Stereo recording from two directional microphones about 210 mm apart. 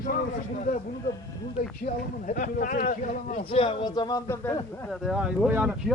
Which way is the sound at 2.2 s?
40° left (ahead or behind).